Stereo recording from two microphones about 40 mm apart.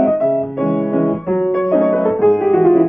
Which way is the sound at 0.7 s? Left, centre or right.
Centre.